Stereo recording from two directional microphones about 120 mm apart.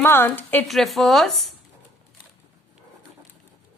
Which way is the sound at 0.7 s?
Centre (ahead or behind).